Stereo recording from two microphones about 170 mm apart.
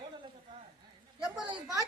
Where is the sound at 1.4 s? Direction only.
30° right (ahead or behind).